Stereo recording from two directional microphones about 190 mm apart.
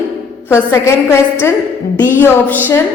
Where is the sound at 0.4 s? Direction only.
15° left (ahead or behind).